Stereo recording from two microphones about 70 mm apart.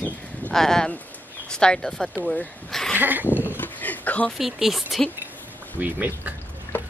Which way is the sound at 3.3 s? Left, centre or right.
Right.